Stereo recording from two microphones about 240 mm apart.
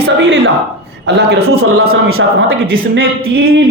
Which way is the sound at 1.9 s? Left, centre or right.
Right.